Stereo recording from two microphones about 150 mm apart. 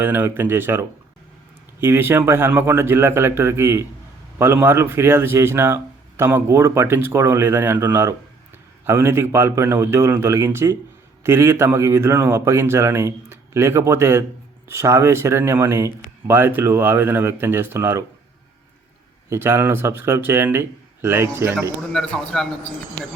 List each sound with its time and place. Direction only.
0.0 s speech: 15° right (ahead or behind)
19.3 s speech: 15° right (ahead or behind)
21.9 s a man's voice: 5° left (ahead or behind)